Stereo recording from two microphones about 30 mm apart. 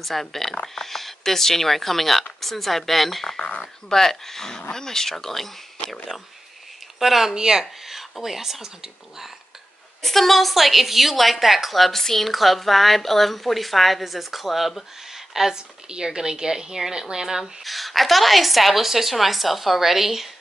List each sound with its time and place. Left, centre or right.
0.0 s a woman's voice: centre
7.0 s speech: centre
7.3 s a woman's voice: right
7.8 s speech: centre
10.0 s a woman's voice: centre
14.8 s a sound: centre
15.5 s a woman's voice: right
17.6 s a woman's voice: centre